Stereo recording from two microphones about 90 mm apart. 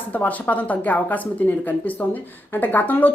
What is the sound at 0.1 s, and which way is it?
A woman's voice, 20° left (ahead or behind).